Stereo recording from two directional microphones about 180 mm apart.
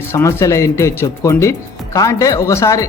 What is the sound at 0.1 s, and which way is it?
Speech, 15° left (ahead or behind).